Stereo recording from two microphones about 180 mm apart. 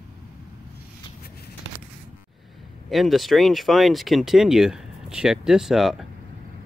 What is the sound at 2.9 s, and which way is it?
Speech, centre (ahead or behind).